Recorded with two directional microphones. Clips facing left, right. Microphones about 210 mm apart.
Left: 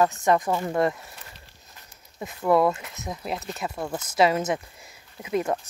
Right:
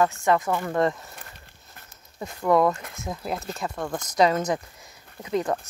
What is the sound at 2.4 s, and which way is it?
Speech, 5° left (ahead or behind).